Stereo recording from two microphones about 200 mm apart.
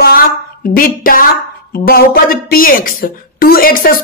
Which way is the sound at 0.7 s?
45° left (ahead or behind).